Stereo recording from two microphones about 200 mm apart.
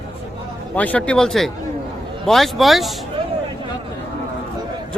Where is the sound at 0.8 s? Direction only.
5° left (ahead or behind).